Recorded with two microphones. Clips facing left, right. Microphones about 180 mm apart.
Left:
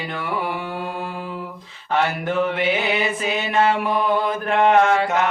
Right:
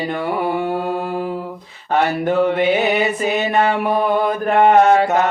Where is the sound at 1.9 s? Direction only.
35° right (ahead or behind).